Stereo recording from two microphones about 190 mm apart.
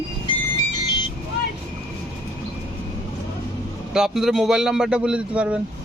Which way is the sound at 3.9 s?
Centre (ahead or behind).